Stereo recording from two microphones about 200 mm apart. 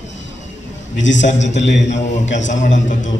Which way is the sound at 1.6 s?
60° left (ahead or behind).